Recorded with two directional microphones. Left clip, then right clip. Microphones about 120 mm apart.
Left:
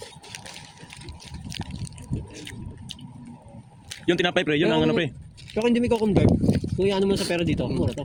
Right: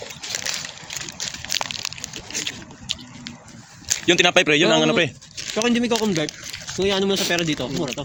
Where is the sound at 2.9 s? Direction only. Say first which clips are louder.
Right 13 dB; 35° left (ahead or behind).